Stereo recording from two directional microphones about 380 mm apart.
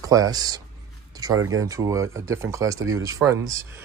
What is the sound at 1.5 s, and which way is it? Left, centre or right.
Speech, centre.